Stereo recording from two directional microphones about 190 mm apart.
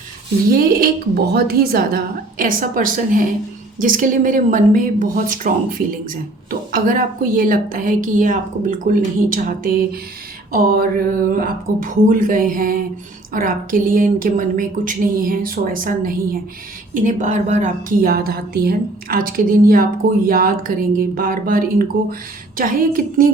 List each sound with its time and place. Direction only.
0.5 s a woman's voice: 50° right (ahead or behind)